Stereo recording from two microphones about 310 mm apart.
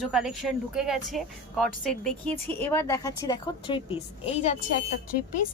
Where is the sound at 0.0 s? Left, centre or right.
Centre; by 4.5 s left.